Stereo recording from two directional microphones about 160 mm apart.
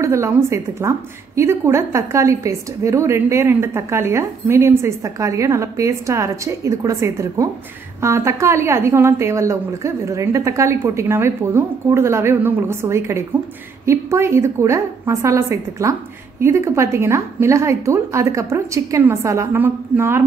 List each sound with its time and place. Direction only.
0.0 s a woman's voice: 20° right (ahead or behind)